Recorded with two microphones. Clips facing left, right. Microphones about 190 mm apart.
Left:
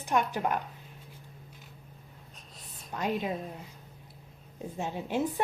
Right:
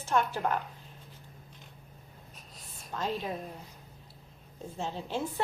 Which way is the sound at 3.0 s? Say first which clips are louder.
Left 3 dB; 15° left (ahead or behind).